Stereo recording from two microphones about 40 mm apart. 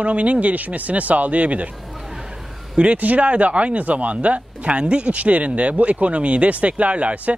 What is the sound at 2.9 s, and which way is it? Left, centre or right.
Speech, right.